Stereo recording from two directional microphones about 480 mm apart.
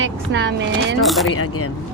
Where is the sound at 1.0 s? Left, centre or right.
Centre.